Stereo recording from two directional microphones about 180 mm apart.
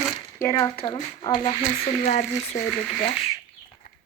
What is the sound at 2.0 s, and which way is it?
Speech, 45° left (ahead or behind).